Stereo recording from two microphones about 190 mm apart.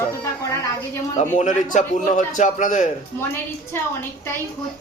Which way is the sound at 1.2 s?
40° left (ahead or behind).